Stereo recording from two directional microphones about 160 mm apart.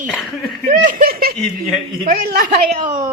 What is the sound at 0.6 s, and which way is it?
A woman's voice, 60° right (ahead or behind).